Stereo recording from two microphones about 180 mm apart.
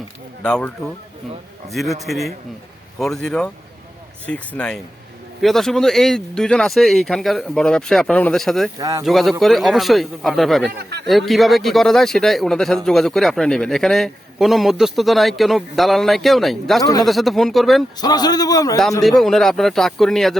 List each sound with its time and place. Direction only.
0.4 s speech: 5° left (ahead or behind)
1.7 s speech: centre (ahead or behind)
8.8 s speech: 20° right (ahead or behind)
9.0 s speech: centre (ahead or behind)
10.7 s speech: 65° right (ahead or behind)
11.0 s speech: centre (ahead or behind)
16.8 s a man's voice: 20° left (ahead or behind)
17.1 s speech: centre (ahead or behind)
18.0 s a man's voice: 20° left (ahead or behind)
19.0 s speech: centre (ahead or behind)